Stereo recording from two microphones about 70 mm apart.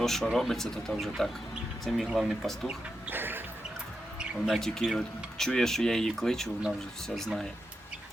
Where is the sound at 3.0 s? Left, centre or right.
Right.